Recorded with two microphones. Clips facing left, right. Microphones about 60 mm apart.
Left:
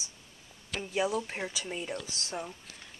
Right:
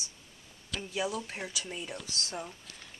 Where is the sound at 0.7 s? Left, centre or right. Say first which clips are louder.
Left 3 dB; left.